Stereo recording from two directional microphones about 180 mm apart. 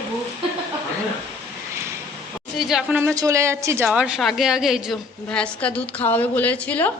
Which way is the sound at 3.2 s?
15° right (ahead or behind).